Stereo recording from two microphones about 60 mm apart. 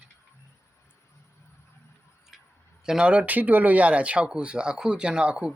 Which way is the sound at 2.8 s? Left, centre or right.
Centre.